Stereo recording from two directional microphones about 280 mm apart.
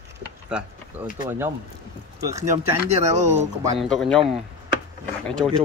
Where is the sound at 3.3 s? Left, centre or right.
Centre.